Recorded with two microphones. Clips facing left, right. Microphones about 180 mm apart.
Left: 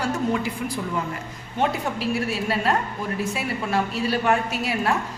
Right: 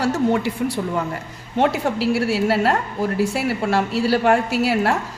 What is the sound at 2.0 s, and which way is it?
A woman's voice, 80° right.